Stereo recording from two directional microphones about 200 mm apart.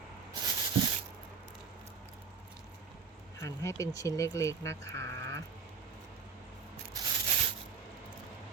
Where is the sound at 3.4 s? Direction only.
15° left (ahead or behind).